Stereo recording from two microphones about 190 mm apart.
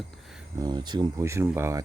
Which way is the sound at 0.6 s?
20° right (ahead or behind).